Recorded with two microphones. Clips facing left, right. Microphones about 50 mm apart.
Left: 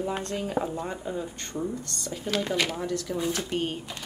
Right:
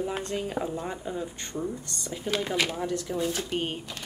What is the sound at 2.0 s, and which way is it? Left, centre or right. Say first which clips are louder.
Speech: right 1 dB; centre.